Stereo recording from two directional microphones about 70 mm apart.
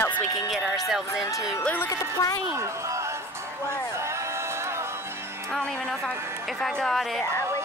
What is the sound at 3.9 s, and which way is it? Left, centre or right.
Music, right.